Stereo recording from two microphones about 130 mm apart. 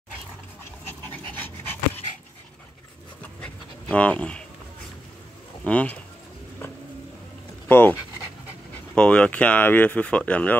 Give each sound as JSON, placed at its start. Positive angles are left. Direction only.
{"t": 1.3, "sound": "dog", "side_deg": 15}
{"t": 3.2, "sound": "dog", "side_deg": 10}
{"t": 5.6, "sound": "speech", "side_deg": 10}
{"t": 7.6, "sound": "speech", "side_deg": 15}
{"t": 8.9, "sound": "speech", "side_deg": 10}